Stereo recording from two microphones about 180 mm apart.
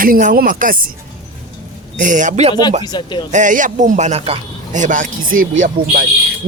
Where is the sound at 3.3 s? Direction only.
45° right (ahead or behind).